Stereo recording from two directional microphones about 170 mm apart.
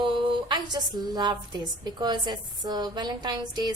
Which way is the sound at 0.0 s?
30° right (ahead or behind).